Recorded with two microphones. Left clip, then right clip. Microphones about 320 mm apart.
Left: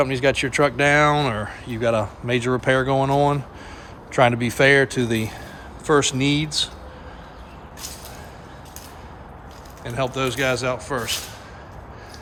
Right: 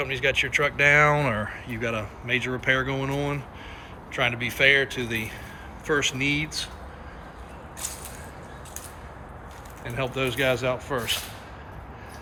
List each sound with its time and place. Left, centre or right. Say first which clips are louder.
0.0 s speech: left 4 dB; centre
9.8 s speech: left 4 dB; centre